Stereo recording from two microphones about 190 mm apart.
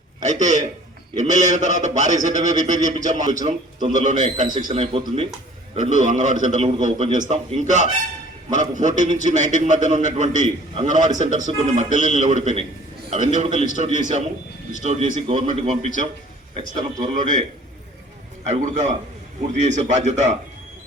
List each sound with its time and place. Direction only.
0.2 s a man's voice: 40° right (ahead or behind)
18.4 s a man's voice: 40° right (ahead or behind)